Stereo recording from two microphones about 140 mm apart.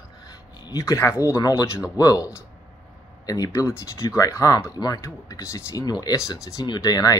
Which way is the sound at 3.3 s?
25° left (ahead or behind).